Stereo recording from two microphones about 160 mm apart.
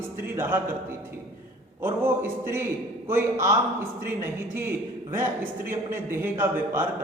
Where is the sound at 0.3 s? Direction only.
15° right (ahead or behind).